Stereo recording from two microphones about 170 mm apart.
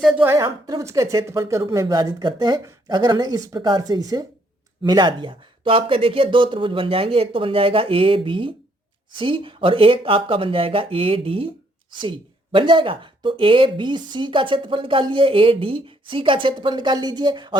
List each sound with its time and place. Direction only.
0.0 s speech: 10° right (ahead or behind)